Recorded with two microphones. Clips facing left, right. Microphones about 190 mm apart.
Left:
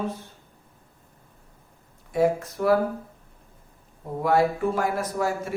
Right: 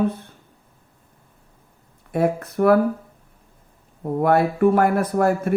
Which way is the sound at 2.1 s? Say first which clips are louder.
Right 1 dB; 60° right (ahead or behind).